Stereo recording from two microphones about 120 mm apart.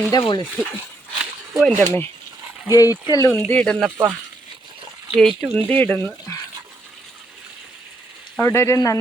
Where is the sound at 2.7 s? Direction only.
30° left (ahead or behind).